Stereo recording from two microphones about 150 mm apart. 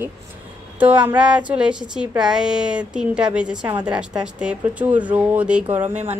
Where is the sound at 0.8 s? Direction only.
10° right (ahead or behind).